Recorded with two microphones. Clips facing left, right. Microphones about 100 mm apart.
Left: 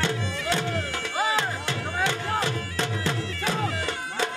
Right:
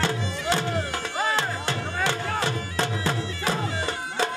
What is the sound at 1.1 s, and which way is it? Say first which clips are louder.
Music: left 1 dB; 5° left (ahead or behind).